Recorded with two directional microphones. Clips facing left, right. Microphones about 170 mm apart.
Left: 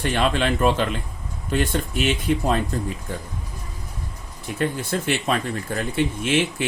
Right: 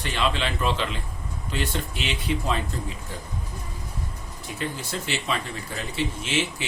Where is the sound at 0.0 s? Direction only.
50° left (ahead or behind).